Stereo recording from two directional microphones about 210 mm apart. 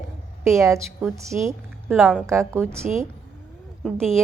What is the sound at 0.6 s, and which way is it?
A woman's voice, 15° right (ahead or behind).